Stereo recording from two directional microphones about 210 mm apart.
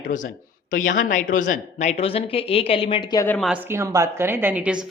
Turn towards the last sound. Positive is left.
turn(degrees=-5)  # may be behind; listen again after turning